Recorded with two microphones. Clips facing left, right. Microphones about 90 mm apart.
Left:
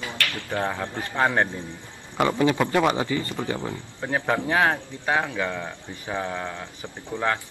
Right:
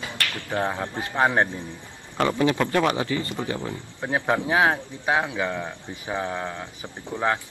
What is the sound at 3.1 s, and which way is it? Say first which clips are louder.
Speech: even; 10° right (ahead or behind).